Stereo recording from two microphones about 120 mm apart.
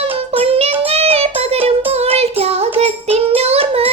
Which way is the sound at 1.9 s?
60° right (ahead or behind).